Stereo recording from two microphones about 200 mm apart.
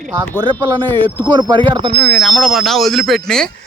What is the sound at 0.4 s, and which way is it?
Speech, 20° right (ahead or behind).